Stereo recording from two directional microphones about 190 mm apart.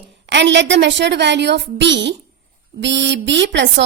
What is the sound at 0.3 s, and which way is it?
A woman's voice, 70° right (ahead or behind).